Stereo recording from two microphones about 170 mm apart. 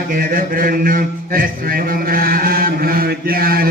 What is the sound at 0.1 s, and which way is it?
Mantra, 55° right (ahead or behind).